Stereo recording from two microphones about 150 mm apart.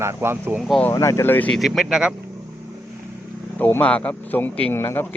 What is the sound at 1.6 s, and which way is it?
Speech, centre (ahead or behind).